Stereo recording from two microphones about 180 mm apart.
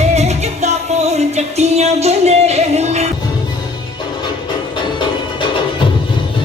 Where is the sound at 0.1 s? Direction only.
35° right (ahead or behind).